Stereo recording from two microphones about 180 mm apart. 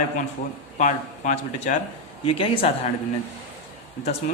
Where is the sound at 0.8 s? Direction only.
45° left (ahead or behind).